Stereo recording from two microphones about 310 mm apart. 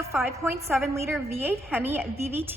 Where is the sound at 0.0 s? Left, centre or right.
Centre.